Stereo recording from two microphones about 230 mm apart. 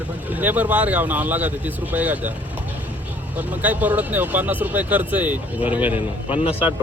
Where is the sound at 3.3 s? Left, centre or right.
Centre.